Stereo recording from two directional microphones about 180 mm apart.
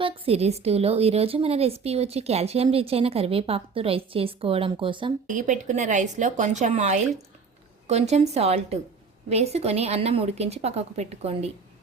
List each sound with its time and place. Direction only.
0.0 s a woman's voice: 35° right (ahead or behind)
5.3 s a woman's voice: 45° right (ahead or behind)